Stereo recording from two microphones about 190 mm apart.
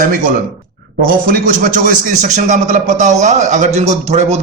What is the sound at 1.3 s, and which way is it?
A man's voice, 50° right (ahead or behind).